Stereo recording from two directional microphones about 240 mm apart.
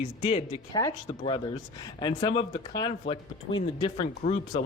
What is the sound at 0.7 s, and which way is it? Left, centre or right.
Speech, centre.